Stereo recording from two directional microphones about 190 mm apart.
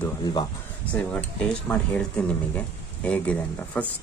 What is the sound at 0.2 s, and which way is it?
Speech, 25° left (ahead or behind).